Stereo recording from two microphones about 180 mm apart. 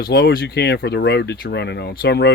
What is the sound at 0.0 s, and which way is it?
Speech, 60° left (ahead or behind).